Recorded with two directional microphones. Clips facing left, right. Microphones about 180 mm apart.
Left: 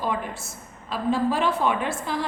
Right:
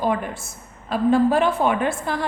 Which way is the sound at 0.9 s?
55° right (ahead or behind).